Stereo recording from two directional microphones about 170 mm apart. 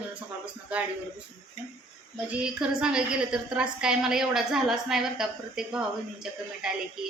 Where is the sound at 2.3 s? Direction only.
5° right (ahead or behind).